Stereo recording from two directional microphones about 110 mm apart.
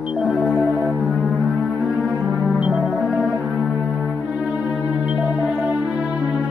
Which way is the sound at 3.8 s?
5° right (ahead or behind).